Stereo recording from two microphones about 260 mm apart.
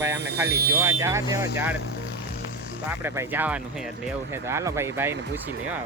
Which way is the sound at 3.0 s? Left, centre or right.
Centre.